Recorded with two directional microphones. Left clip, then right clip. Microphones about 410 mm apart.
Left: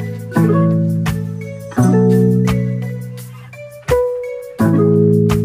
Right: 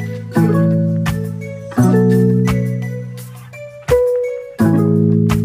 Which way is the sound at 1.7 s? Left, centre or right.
Centre.